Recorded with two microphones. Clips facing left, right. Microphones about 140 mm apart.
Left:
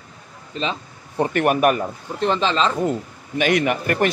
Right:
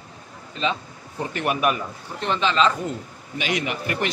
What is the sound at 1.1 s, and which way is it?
Speech, 55° left (ahead or behind).